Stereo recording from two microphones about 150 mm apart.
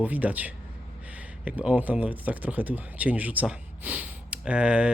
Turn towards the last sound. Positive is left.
turn(degrees=-5)  # may be behind; listen again after turning